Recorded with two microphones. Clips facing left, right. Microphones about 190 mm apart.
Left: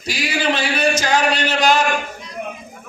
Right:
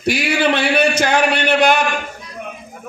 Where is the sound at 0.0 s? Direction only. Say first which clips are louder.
Right 5 dB; 60° right (ahead or behind).